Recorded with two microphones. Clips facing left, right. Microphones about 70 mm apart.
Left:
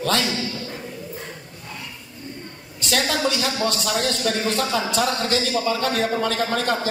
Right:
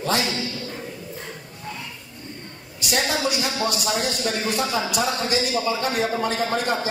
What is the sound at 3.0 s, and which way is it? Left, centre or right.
A man's voice, centre.